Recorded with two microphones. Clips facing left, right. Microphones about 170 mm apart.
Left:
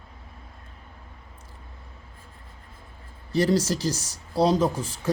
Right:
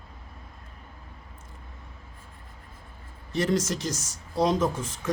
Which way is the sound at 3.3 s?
35° left (ahead or behind).